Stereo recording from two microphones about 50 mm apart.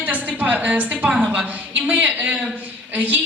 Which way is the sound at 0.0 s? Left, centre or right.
Right.